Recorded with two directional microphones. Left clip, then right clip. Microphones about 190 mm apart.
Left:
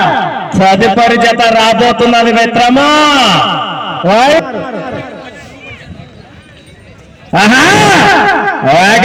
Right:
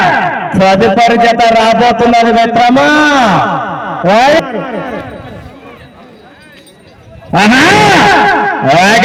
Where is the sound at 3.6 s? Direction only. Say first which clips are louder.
Even; 35° left (ahead or behind).